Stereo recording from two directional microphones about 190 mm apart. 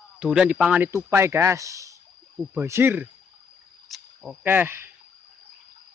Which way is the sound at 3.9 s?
Centre (ahead or behind).